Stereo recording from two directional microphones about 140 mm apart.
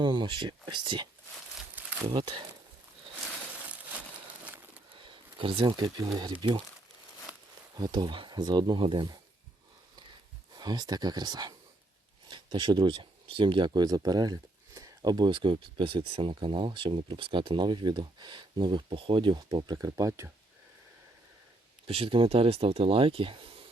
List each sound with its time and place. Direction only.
0.0 s speech: 30° right (ahead or behind)
2.0 s speech: 35° right (ahead or behind)
4.9 s speech: 35° right (ahead or behind)
7.8 s speech: 30° right (ahead or behind)
10.5 s speech: 30° right (ahead or behind)
21.8 s speech: 45° right (ahead or behind)